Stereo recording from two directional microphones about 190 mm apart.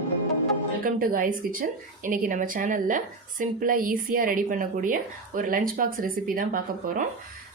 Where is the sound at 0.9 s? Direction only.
50° right (ahead or behind).